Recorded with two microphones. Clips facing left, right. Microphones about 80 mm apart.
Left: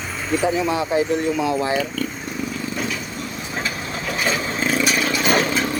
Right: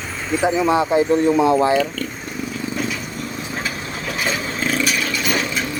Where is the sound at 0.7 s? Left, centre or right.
Right.